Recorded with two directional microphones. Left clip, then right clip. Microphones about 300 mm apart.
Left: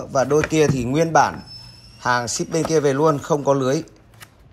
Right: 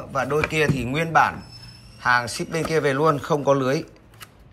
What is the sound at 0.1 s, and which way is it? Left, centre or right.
Speech, centre.